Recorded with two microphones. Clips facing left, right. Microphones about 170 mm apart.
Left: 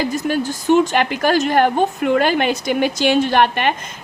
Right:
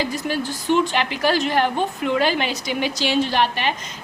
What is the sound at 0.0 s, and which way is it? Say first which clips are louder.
A woman's voice: left 4 dB; 45° left (ahead or behind).